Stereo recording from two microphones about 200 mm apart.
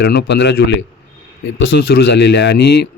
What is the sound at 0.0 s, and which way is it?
A man's voice, 55° left (ahead or behind).